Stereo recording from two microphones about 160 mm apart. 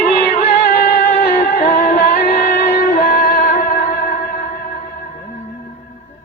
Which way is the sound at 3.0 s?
70° left (ahead or behind).